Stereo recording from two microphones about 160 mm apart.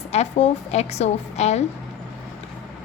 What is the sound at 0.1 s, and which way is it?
A woman's voice, 40° left (ahead or behind).